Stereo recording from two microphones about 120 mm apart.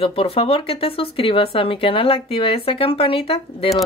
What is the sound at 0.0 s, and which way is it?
Speech, 50° left (ahead or behind).